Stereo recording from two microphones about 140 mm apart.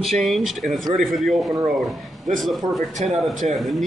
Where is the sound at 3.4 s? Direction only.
60° right (ahead or behind).